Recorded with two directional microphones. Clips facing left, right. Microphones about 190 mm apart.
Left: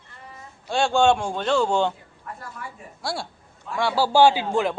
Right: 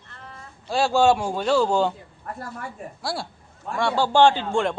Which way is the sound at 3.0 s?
Centre (ahead or behind).